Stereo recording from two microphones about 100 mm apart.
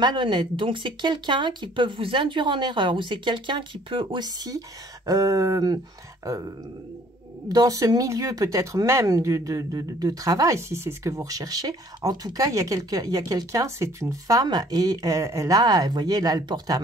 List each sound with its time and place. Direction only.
0.0 s speech: 50° right (ahead or behind)
4.5 s speech: 35° right (ahead or behind)
7.4 s speech: 35° right (ahead or behind)
11.1 s speech: 35° right (ahead or behind)